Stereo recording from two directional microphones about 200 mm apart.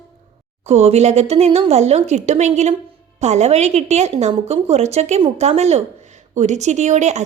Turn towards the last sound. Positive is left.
turn(degrees=-35)  # may be behind; listen again after turning